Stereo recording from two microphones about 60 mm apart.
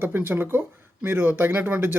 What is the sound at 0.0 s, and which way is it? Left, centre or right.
Speech, right.